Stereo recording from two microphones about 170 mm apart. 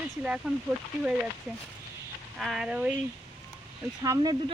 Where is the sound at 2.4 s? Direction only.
5° right (ahead or behind).